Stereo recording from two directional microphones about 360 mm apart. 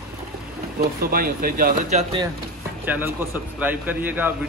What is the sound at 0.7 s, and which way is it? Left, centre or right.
Speech, right.